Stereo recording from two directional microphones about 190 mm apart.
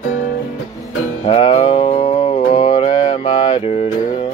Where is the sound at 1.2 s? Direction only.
30° left (ahead or behind).